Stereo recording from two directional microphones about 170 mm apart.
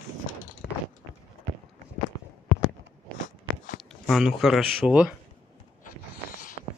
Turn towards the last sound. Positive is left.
turn(degrees=-5)  # may be behind; listen again after turning